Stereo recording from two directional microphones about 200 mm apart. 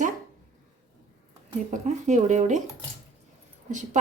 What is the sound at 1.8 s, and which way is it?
Speech, 35° right (ahead or behind).